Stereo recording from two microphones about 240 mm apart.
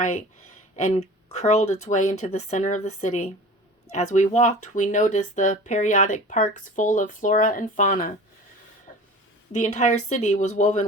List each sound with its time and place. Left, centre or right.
0.8 s speech: left
9.5 s speech: left